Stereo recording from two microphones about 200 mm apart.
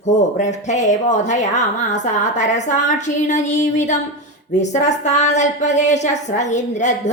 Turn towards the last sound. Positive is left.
turn(degrees=35)  # may be behind; listen again after turning